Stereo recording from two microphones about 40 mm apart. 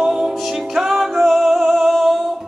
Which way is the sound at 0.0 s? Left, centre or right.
Centre.